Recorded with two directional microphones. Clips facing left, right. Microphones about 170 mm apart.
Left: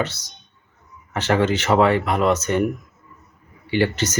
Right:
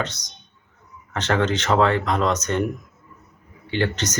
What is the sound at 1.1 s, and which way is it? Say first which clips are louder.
Speech: left 2 dB; 10° left (ahead or behind).